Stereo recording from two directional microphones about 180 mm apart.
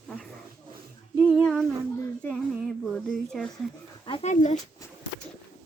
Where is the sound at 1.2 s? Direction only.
Centre (ahead or behind).